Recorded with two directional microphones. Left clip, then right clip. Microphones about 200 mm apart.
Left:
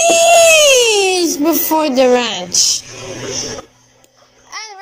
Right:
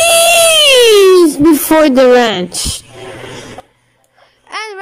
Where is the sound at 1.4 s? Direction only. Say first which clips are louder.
Right 6 dB; 50° right (ahead or behind).